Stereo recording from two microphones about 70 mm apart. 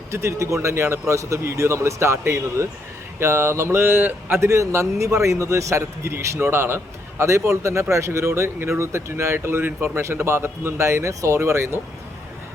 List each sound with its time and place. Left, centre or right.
0.1 s a man's voice: right
4.4 s a man's voice: right